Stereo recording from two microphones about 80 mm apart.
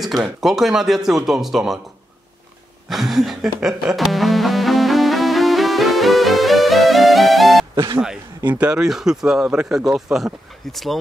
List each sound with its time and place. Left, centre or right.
0.0 s speech: centre
2.9 s music: centre
7.7 s speech: right
8.5 s speech: centre